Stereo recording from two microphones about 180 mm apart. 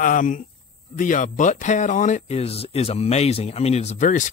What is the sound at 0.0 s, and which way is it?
Speech, 45° left (ahead or behind).